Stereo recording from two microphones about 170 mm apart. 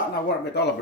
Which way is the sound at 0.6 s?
75° left (ahead or behind).